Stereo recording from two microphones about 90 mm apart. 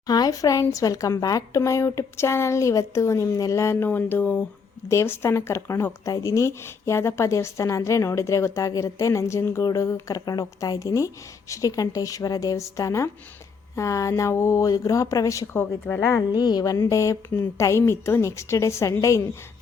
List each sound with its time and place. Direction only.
0.1 s a woman's voice: 45° left (ahead or behind); by 4.4 s 20° left (ahead or behind)
4.9 s a woman's voice: 30° left (ahead or behind)
15.5 s a woman's voice: 25° left (ahead or behind)
16.3 s speech: 50° left (ahead or behind)
16.8 s a woman's voice: 35° left (ahead or behind)